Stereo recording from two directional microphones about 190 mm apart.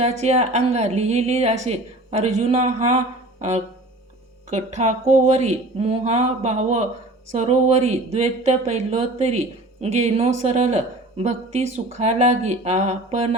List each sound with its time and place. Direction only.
0.0 s speech: 35° right (ahead or behind)
4.5 s speech: 35° right (ahead or behind)